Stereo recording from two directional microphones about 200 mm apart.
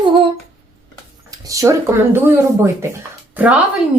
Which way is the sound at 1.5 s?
15° right (ahead or behind).